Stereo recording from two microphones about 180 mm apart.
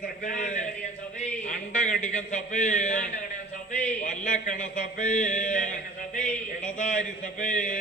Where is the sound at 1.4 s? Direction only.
40° left (ahead or behind).